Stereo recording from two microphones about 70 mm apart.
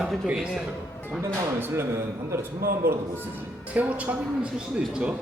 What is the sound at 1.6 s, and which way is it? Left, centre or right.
Speech, right.